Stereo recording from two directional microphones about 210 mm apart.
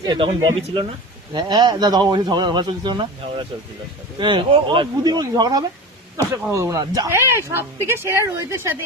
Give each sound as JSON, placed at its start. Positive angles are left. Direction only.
{"t": 0.0, "sound": "speech", "side_deg": -20}
{"t": 1.3, "sound": "a woman's voice", "side_deg": -20}